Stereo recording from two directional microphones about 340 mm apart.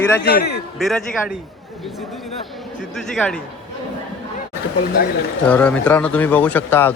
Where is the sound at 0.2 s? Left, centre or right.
Left.